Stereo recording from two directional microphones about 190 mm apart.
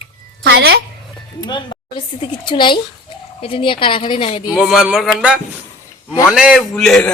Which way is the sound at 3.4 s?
30° left (ahead or behind).